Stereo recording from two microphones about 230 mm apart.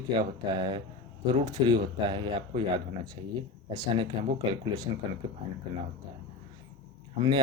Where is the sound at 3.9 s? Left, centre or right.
Right.